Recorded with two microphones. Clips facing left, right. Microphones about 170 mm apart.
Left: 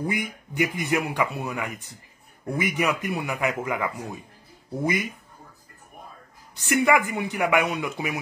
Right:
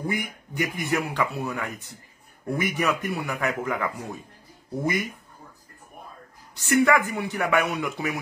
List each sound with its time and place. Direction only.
0.0 s a man's voice: 20° left (ahead or behind)
6.6 s a man's voice: 20° left (ahead or behind)